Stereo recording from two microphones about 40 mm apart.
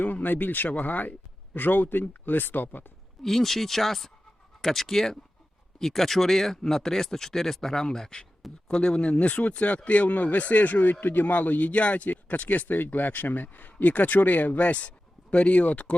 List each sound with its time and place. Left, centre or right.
0.0 s speech: left
3.2 s speech: centre; by 10.9 s left
11.0 s speech: left